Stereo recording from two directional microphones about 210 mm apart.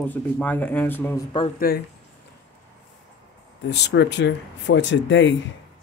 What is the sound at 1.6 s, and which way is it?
Speech, 45° left (ahead or behind).